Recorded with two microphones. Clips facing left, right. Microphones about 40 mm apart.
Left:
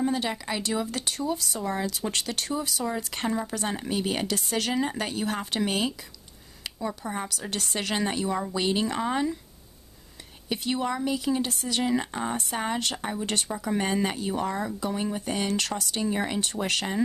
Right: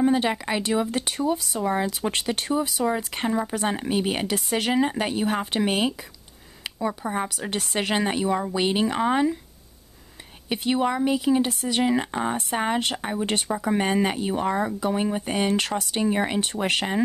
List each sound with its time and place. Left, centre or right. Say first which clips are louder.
0.0 s speech: right 6 dB; right
10.5 s speech: right 5 dB; right